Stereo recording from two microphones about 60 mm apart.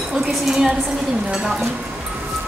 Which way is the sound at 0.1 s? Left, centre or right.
Centre.